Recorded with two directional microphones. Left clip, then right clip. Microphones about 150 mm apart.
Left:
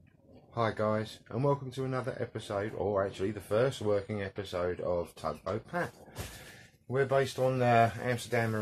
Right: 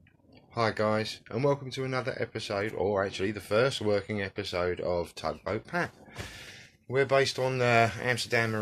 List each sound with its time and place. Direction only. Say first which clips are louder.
0.6 s speech: right 3 dB; 15° right (ahead or behind)
6.9 s speech: right 4 dB; 10° right (ahead or behind)